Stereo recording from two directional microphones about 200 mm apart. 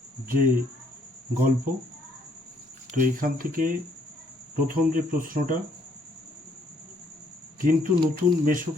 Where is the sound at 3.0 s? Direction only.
45° right (ahead or behind).